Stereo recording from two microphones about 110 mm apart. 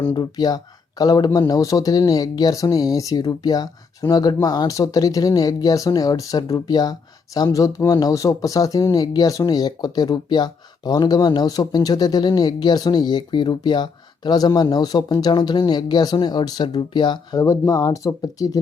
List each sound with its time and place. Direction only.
0.1 s speech: 40° left (ahead or behind)
17.4 s speech: 30° left (ahead or behind)